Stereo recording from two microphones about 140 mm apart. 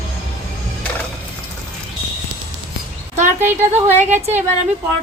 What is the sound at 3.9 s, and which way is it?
Speech, 55° right (ahead or behind).